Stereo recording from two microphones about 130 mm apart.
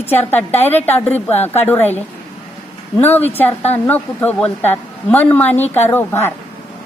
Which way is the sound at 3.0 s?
15° left (ahead or behind).